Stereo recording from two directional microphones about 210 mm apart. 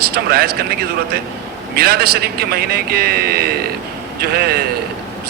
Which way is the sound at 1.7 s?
45° right (ahead or behind).